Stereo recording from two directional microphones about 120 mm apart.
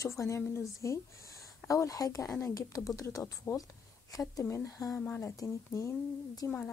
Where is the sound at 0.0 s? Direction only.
25° left (ahead or behind).